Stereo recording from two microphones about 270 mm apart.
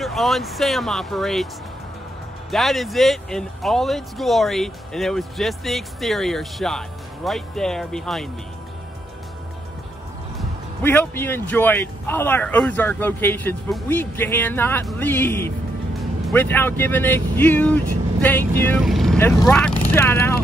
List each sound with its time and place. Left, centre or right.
0.0 s speech: centre
2.5 s speech: centre
10.3 s speech: centre